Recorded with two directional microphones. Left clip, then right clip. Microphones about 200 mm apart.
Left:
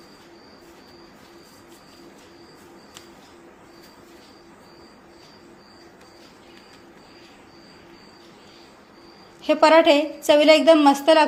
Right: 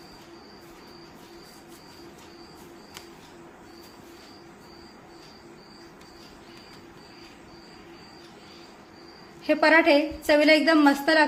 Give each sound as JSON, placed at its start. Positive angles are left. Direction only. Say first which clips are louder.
{"t": 9.4, "sound": "a woman's voice", "louder": "left 5 dB", "side_deg": 25}